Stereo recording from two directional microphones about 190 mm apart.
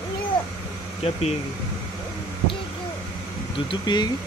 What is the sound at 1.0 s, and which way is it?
Speech, 30° left (ahead or behind).